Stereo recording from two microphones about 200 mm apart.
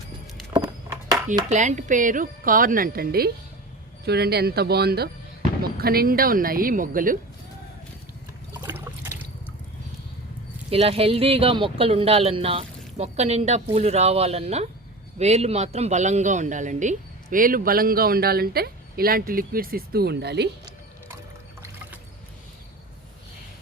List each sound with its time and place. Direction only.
0.3 s patter: 5° right (ahead or behind)
0.9 s a sound: 15° right (ahead or behind)
1.5 s speech: 35° right (ahead or behind)
8.6 s water: 10° right (ahead or behind)
10.7 s speech: 30° right (ahead or behind); by 20.5 s 60° right (ahead or behind)